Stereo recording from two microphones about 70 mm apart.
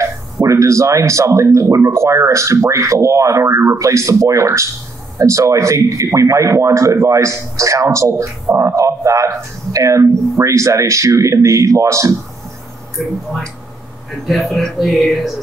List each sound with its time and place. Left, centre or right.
0.0 s a man's voice: right
12.9 s speech: centre